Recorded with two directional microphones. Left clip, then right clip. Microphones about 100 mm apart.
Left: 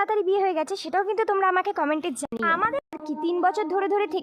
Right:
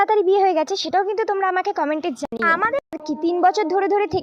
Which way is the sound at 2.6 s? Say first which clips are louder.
Right 4 dB; 40° right (ahead or behind).